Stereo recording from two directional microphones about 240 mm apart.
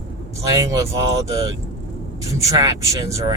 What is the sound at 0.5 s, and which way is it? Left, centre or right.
Speech, centre.